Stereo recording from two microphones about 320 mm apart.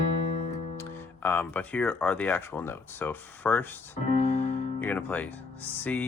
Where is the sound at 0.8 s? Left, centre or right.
Centre.